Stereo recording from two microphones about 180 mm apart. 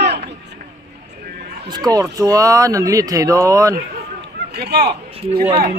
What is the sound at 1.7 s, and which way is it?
Speech, 20° right (ahead or behind).